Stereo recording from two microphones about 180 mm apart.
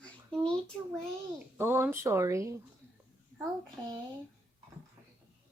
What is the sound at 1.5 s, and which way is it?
Speech, 15° right (ahead or behind).